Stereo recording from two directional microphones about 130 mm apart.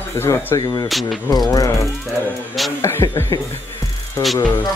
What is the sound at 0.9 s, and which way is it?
Speech, centre (ahead or behind).